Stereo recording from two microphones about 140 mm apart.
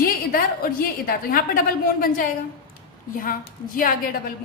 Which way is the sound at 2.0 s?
75° left (ahead or behind).